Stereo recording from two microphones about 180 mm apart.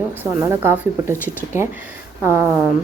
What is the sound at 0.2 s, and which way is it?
Speech, 15° right (ahead or behind).